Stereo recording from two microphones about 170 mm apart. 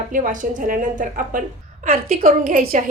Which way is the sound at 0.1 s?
50° right (ahead or behind).